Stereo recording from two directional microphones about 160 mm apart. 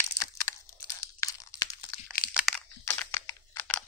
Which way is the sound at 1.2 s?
20° left (ahead or behind).